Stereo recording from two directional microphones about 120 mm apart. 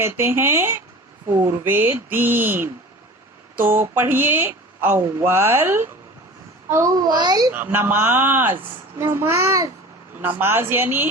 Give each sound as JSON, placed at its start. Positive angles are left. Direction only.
{"t": 0.0, "sound": "a woman's voice", "side_deg": -20}
{"t": 7.5, "sound": "a woman's voice", "side_deg": -15}